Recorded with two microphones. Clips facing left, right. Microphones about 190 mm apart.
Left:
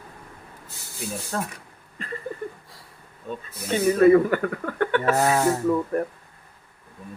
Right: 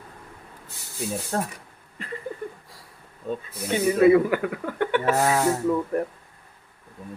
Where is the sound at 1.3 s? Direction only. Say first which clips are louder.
Right 2 dB; 40° right (ahead or behind).